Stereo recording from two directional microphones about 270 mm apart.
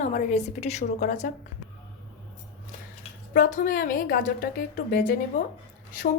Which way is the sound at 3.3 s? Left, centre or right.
Left.